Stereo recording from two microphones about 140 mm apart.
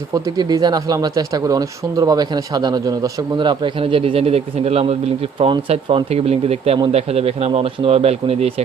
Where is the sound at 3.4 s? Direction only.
35° right (ahead or behind).